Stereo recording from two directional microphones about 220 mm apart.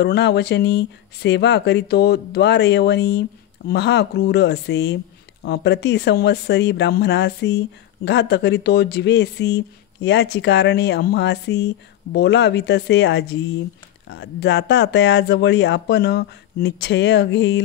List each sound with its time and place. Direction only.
0.0 s speech: 50° left (ahead or behind)